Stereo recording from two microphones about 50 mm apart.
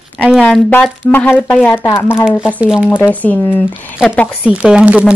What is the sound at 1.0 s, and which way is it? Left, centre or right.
Speech, left.